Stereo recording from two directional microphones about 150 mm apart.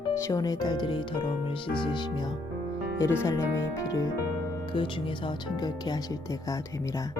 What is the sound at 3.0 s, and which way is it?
Speech, 20° left (ahead or behind).